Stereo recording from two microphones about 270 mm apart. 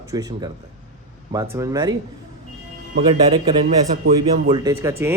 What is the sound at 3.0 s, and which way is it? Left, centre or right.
Speech, centre.